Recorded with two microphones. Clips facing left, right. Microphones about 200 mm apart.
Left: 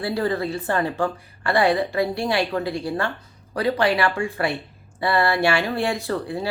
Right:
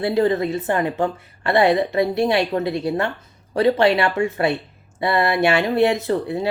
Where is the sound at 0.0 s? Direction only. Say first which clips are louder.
Right 5 dB; 20° right (ahead or behind).